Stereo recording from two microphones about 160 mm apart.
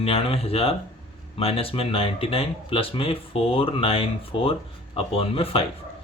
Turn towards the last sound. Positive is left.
turn(degrees=35)  # may be behind; listen again after turning